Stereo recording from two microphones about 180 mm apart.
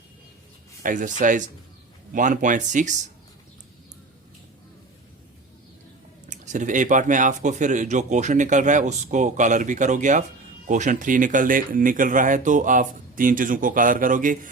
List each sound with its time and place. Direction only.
0.8 s speech: 45° right (ahead or behind)
6.2 s speech: 40° right (ahead or behind)